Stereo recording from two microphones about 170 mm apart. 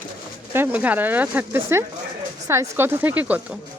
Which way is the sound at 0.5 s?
10° right (ahead or behind).